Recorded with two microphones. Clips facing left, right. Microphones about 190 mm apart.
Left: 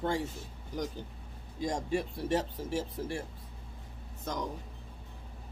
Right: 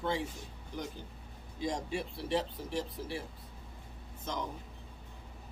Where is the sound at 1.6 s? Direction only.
45° left (ahead or behind).